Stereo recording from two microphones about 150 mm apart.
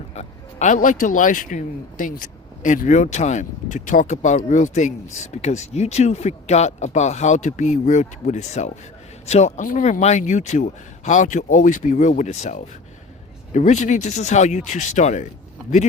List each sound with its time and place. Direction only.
0.1 s a man's voice: 50° left (ahead or behind)